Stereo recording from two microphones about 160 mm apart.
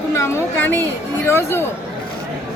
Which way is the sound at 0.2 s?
15° left (ahead or behind).